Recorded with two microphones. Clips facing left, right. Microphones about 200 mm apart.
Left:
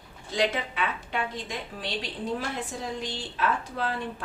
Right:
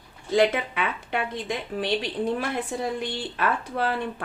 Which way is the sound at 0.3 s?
55° right (ahead or behind).